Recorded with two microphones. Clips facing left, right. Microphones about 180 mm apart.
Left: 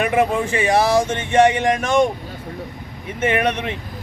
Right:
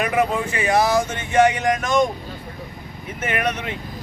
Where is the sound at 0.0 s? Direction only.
30° left (ahead or behind).